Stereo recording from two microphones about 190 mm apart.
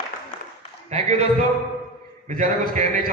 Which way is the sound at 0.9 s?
40° right (ahead or behind).